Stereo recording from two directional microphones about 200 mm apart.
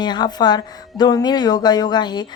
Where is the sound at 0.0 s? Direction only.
20° left (ahead or behind).